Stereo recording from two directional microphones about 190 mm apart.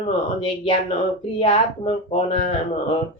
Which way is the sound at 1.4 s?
30° left (ahead or behind).